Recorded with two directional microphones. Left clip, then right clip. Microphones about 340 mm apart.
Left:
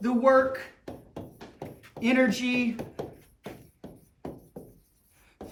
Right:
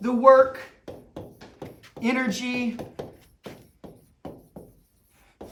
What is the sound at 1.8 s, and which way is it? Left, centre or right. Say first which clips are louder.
Speech: left 2 dB; centre.